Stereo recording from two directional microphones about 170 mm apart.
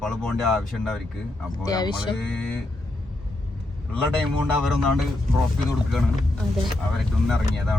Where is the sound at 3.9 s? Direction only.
5° left (ahead or behind).